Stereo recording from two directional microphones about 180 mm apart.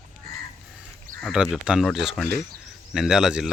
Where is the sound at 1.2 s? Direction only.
Centre (ahead or behind).